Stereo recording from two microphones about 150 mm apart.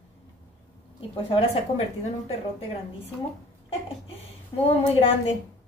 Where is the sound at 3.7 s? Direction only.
40° left (ahead or behind).